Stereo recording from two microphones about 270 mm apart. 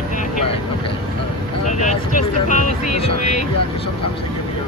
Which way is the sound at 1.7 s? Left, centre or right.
Left.